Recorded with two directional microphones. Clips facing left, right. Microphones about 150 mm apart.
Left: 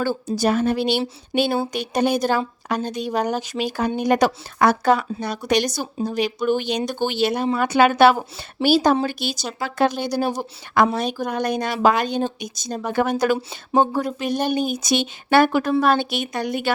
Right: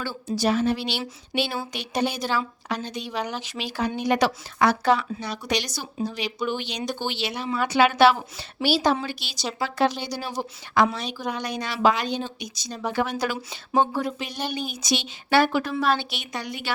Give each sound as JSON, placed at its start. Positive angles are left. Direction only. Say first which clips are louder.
{"t": 0.3, "sound": "a woman's voice", "louder": "left 2 dB", "side_deg": 50}